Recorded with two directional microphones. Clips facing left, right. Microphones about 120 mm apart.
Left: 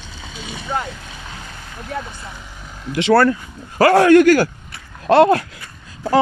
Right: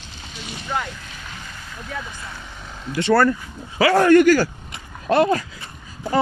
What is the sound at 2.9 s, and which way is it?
Speech, 70° left (ahead or behind).